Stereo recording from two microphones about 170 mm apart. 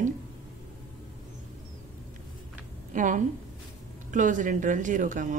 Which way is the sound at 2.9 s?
50° right (ahead or behind).